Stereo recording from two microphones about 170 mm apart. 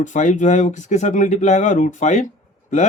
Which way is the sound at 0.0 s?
45° left (ahead or behind).